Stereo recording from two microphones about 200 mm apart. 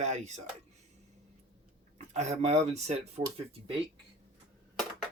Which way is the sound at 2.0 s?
35° right (ahead or behind).